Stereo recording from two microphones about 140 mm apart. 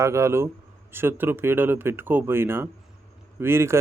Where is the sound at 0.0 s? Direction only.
20° right (ahead or behind).